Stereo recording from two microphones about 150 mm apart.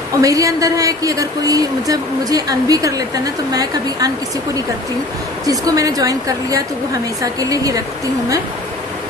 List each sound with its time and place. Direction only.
0.2 s a woman's voice: 20° right (ahead or behind)
5.5 s a woman's voice: 25° right (ahead or behind)